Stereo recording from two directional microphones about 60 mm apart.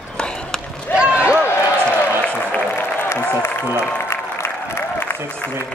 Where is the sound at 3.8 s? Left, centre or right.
Left.